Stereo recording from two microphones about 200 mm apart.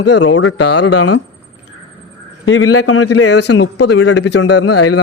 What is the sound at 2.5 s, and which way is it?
Speech, 90° left.